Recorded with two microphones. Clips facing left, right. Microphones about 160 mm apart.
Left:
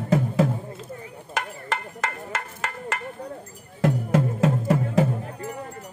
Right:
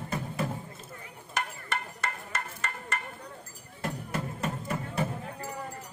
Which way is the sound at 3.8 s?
90° left.